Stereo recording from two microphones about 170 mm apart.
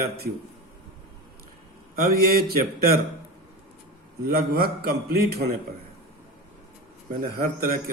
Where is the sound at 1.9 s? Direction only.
60° right (ahead or behind).